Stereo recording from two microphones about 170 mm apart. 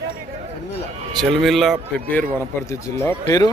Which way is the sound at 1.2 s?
Centre (ahead or behind).